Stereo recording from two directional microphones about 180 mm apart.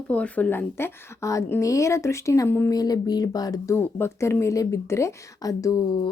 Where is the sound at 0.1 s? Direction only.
10° left (ahead or behind).